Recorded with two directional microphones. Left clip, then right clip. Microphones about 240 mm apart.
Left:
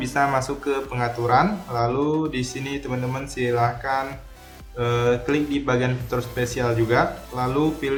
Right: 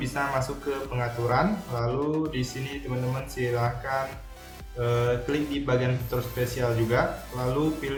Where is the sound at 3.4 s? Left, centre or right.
Centre.